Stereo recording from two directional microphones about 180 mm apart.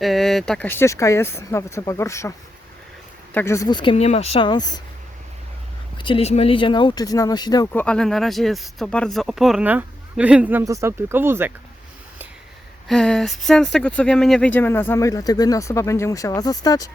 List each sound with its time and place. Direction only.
0.0 s speech: centre (ahead or behind); by 2.3 s 15° left (ahead or behind)
3.3 s speech: 15° left (ahead or behind)
6.0 s speech: 30° left (ahead or behind)
7.7 s speech: 10° left (ahead or behind); by 11.5 s 10° right (ahead or behind)
12.9 s speech: 5° left (ahead or behind); by 16.9 s 20° left (ahead or behind)